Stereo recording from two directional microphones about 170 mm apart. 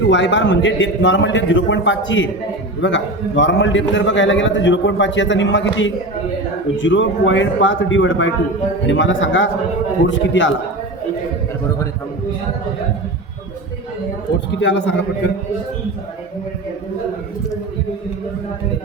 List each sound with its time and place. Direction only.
0.1 s a man's voice: 90° left
14.6 s a man's voice: 90° left